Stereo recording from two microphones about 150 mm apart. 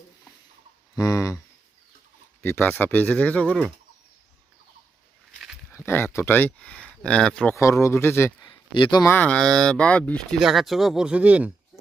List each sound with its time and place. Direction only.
0.9 s a sound: 25° left (ahead or behind)
2.4 s speech: 15° left (ahead or behind)
5.7 s speech: 15° left (ahead or behind)
7.5 s speech: 20° left (ahead or behind)
8.4 s a sound: 30° left (ahead or behind)
9.0 s speech: 10° left (ahead or behind); by 11.5 s 10° right (ahead or behind)